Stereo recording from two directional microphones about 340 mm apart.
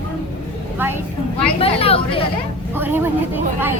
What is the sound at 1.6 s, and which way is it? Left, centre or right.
Speech, centre.